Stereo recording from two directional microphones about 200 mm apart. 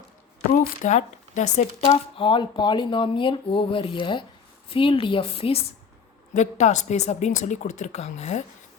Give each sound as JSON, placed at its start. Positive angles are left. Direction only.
{"t": 0.5, "sound": "speech", "side_deg": 45}
{"t": 1.9, "sound": "speech", "side_deg": 25}